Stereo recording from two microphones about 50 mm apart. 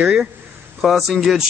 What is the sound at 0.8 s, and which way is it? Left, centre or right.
Speech, centre.